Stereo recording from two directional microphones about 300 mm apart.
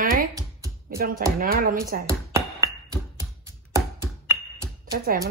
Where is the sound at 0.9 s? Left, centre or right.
Right.